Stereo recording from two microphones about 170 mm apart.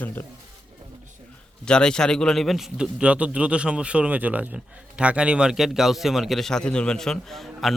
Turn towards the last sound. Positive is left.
turn(degrees=0)  # may be behind; listen again after turning